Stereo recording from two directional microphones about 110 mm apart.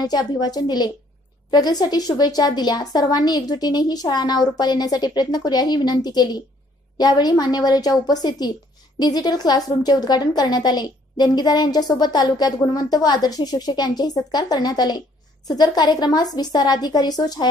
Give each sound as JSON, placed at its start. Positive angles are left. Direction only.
{"t": 0.0, "sound": "a woman's voice", "side_deg": 35}